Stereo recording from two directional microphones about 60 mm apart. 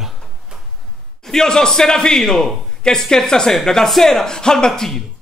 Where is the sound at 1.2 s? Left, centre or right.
Centre.